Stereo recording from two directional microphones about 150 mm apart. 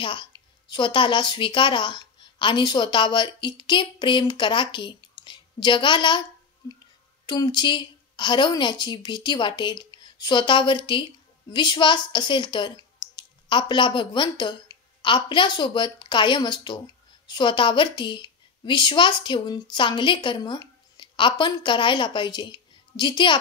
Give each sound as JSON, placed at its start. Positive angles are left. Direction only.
{"t": 0.0, "sound": "a woman's voice", "side_deg": 30}
{"t": 7.2, "sound": "a woman's voice", "side_deg": 25}